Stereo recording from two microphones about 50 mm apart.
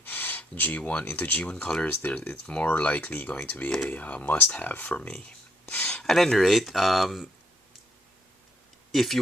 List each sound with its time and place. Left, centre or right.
0.0 s a sound: left
0.8 s speech: left
1.6 s speech: centre
1.9 s speech: left
4.9 s speech: centre
5.6 s a sound: left
6.0 s speech: centre
8.9 s speech: centre